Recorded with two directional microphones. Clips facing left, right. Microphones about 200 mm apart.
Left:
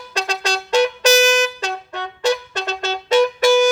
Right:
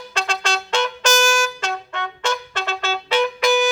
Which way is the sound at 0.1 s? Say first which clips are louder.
Left 2 dB; 40° left (ahead or behind).